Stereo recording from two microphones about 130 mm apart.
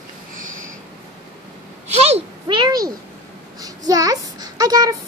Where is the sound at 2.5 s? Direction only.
35° right (ahead or behind).